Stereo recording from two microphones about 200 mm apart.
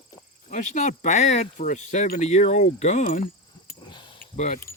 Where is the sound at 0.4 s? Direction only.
40° left (ahead or behind).